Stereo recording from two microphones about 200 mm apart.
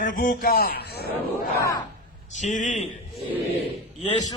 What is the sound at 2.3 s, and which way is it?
Speech, 40° left (ahead or behind).